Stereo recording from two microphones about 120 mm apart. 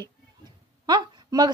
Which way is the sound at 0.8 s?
35° right (ahead or behind).